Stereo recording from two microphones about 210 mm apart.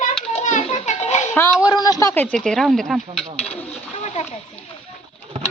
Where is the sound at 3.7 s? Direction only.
30° left (ahead or behind).